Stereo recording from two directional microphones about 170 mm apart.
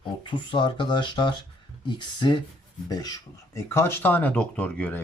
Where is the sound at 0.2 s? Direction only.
25° left (ahead or behind).